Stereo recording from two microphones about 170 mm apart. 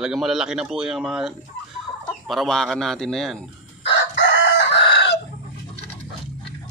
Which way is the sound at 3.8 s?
90° left.